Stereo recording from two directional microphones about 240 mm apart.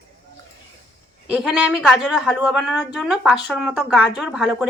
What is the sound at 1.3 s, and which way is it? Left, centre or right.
A woman's voice, centre.